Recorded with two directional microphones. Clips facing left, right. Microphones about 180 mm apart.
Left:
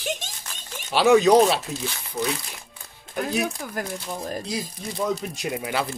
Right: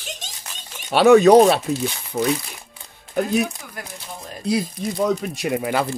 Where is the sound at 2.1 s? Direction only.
45° right (ahead or behind).